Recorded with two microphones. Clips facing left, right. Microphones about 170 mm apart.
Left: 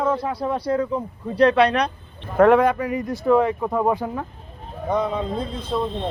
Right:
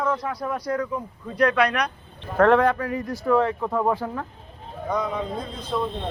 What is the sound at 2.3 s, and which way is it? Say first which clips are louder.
Speech: left 3 dB; 10° left (ahead or behind).